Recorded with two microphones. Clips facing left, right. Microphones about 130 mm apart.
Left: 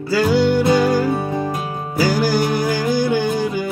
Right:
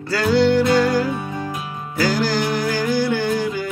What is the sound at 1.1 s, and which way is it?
Music, 35° left (ahead or behind).